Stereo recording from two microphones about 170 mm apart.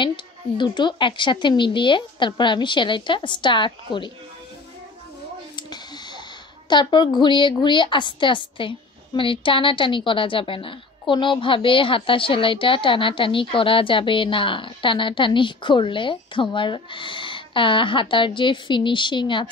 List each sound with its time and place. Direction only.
0.0 s a woman's voice: 30° left (ahead or behind)
5.6 s a sound: 25° left (ahead or behind)
6.7 s a woman's voice: 25° left (ahead or behind)